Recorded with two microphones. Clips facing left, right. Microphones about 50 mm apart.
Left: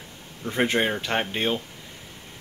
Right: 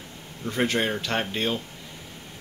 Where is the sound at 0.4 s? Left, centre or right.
Centre.